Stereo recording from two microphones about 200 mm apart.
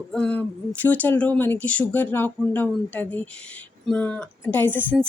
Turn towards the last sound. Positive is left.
turn(degrees=10)  # may be behind; listen again after turning